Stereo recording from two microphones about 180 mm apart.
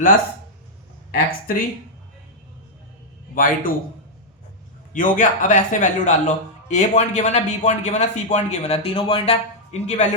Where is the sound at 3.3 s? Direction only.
50° left (ahead or behind).